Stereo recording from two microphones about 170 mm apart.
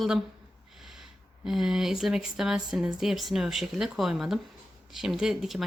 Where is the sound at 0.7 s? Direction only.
Centre (ahead or behind).